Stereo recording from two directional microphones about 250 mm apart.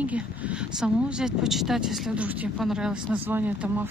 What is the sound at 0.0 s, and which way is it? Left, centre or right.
Speech, centre.